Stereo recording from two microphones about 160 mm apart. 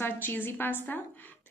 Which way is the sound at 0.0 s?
10° left (ahead or behind).